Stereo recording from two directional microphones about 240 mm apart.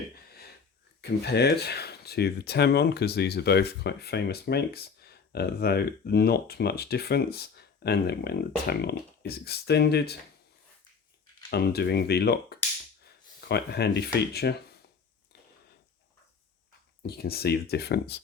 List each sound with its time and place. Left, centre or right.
1.0 s speech: left
11.5 s speech: left
17.0 s speech: left